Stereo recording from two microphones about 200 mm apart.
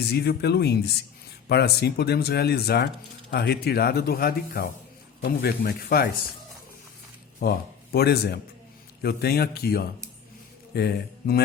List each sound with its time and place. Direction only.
0.1 s speech: 55° left (ahead or behind)
7.4 s speech: 50° left (ahead or behind)